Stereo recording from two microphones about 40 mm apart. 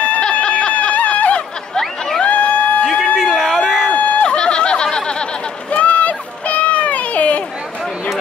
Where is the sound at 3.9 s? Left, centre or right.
Left.